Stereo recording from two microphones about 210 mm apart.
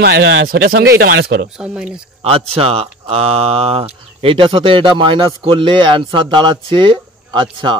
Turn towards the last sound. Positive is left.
turn(degrees=-25)  # may be behind; listen again after turning